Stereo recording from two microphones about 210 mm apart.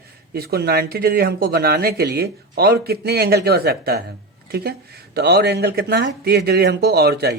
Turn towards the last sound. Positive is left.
turn(degrees=-50)  # may be behind; listen again after turning